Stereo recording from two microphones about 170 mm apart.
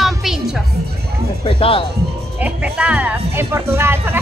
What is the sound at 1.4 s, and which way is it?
Music, 30° left (ahead or behind).